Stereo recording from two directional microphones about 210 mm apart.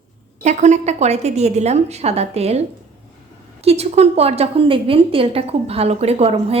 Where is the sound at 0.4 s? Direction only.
35° right (ahead or behind).